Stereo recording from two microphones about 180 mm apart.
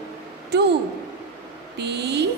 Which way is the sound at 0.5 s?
70° right (ahead or behind).